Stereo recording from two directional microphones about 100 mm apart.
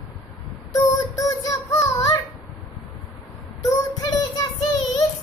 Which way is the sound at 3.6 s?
35° left (ahead or behind).